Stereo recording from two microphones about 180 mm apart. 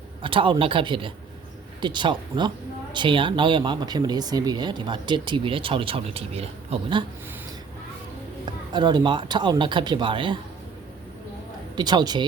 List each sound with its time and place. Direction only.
0.2 s speech: 30° right (ahead or behind)
8.4 s speech: 25° right (ahead or behind)
11.8 s speech: 25° right (ahead or behind)